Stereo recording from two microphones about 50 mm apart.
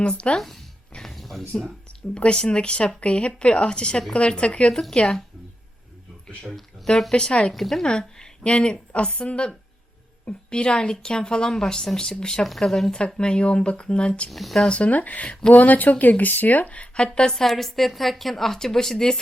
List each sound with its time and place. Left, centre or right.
0.0 s a woman's voice: left
0.3 s speech: centre
0.9 s music: centre
2.1 s a woman's voice: left
4.7 s speech: centre
6.4 s speech: centre
7.5 s speech: centre
7.9 s a woman's voice: centre
13.1 s a woman's voice: centre
14.3 s speech: centre
14.7 s a woman's voice: left; by 19.2 s centre